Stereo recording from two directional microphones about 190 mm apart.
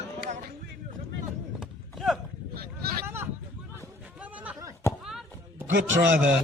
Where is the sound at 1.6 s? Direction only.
Centre (ahead or behind).